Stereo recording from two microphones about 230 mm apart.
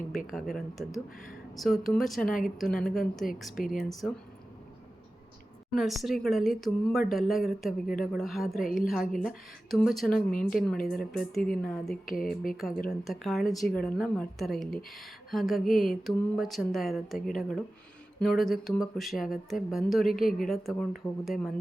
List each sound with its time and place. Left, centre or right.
0.3 s speech: centre
3.5 s a woman's voice: left
3.8 s speech: centre
5.7 s speech: centre
10.2 s a woman's voice: left
11.2 s speech: centre
12.0 s a woman's voice: left
12.9 s speech: centre